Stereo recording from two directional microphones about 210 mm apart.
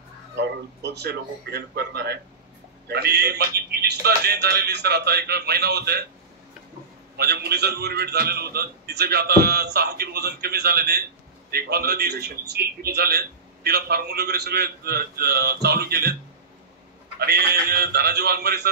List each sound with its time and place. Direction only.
0.4 s a man's voice: 55° right (ahead or behind)
7.2 s a man's voice: 50° right (ahead or behind)
17.2 s a man's voice: 50° right (ahead or behind)